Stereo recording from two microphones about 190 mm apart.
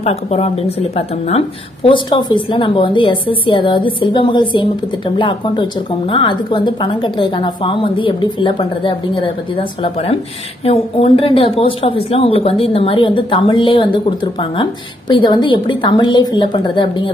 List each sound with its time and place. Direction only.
0.0 s a woman's voice: 35° left (ahead or behind)